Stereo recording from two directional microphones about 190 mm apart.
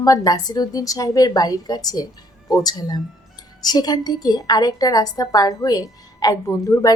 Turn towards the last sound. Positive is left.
turn(degrees=15)  # may be behind; listen again after turning